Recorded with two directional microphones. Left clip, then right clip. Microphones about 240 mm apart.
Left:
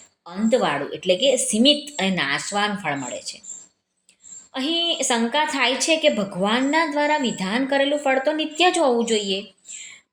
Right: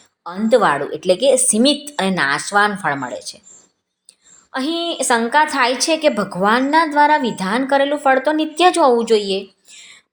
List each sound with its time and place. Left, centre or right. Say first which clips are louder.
0.3 s a woman's voice: right 6 dB; centre
4.5 s a woman's voice: right 1 dB; right